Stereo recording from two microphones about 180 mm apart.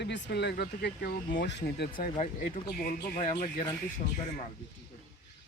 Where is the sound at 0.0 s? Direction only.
70° left (ahead or behind).